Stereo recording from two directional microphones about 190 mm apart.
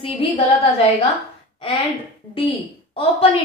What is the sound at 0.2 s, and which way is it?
Speech, 30° left (ahead or behind).